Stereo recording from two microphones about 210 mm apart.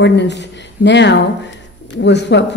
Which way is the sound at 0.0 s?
55° left (ahead or behind).